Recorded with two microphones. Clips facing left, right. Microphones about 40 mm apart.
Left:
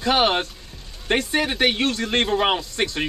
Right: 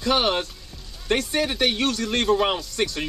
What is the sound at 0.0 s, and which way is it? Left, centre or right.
A man's voice, left.